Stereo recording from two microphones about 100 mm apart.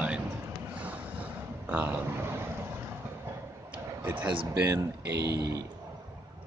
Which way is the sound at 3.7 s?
15° right (ahead or behind).